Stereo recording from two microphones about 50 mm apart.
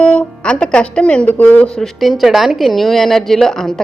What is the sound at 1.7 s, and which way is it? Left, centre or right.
Speech, centre.